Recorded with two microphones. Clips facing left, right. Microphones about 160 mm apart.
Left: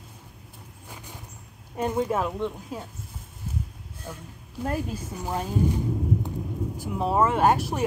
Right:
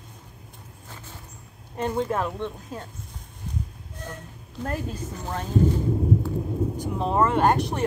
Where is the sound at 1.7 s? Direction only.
10° left (ahead or behind).